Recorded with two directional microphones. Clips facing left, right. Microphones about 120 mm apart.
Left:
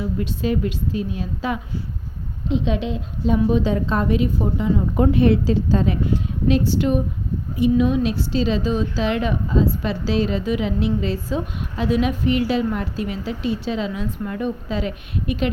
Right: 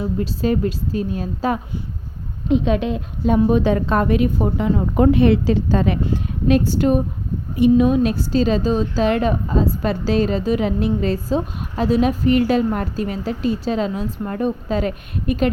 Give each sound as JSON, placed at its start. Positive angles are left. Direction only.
{"t": 0.0, "sound": "a woman's voice", "side_deg": -35}
{"t": 2.5, "sound": "a woman's voice", "side_deg": -50}
{"t": 6.7, "sound": "a woman's voice", "side_deg": -45}